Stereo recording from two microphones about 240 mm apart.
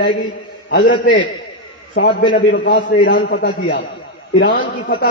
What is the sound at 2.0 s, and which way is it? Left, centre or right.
A man's voice, left.